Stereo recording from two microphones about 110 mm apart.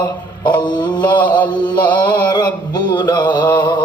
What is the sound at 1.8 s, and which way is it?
Music, 45° left (ahead or behind).